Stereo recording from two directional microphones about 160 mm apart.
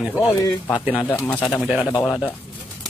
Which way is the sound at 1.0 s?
15° left (ahead or behind).